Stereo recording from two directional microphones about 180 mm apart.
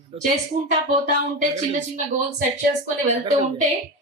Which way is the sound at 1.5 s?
45° right (ahead or behind).